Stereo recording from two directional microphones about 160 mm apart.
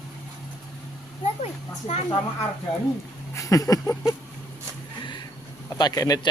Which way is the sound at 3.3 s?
20° left (ahead or behind).